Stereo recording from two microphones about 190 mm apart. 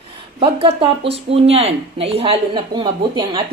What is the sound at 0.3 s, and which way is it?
Speech, 30° right (ahead or behind).